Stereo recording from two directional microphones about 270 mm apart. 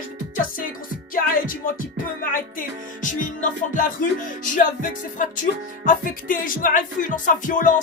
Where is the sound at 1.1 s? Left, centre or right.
Left.